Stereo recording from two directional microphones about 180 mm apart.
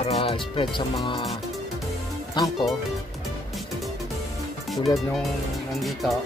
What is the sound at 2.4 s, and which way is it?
Speech, 25° left (ahead or behind).